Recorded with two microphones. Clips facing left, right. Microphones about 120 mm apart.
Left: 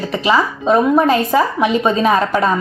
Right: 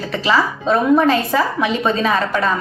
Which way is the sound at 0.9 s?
30° left (ahead or behind).